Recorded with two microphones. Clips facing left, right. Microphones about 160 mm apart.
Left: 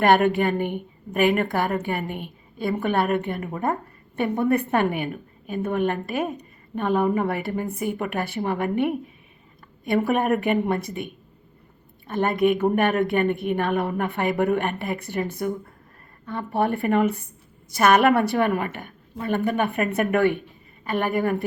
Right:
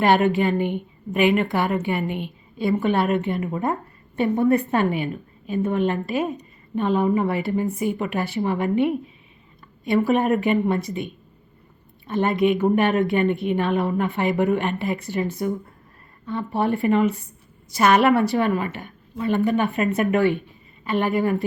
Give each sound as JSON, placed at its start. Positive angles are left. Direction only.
{"t": 0.0, "sound": "a woman's voice", "side_deg": 55}